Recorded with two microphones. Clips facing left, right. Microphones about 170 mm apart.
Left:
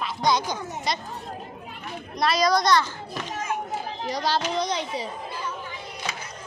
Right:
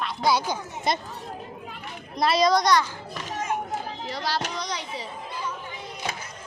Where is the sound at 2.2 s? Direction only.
25° right (ahead or behind).